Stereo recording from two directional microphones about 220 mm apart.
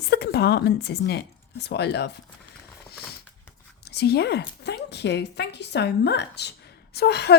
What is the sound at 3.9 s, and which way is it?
Speech, 50° left (ahead or behind).